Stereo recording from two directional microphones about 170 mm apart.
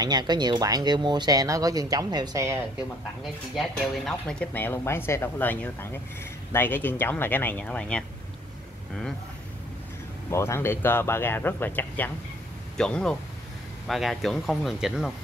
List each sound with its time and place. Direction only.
0.0 s speech: 25° right (ahead or behind)
3.5 s speech: 5° left (ahead or behind)
10.3 s speech: 15° left (ahead or behind); by 15.1 s centre (ahead or behind)